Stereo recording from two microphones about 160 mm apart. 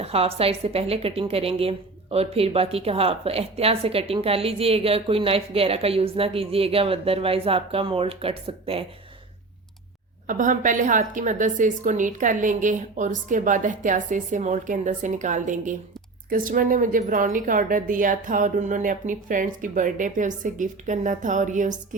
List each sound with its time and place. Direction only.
0.0 s a woman's voice: 40° right (ahead or behind)
10.2 s a woman's voice: 55° right (ahead or behind)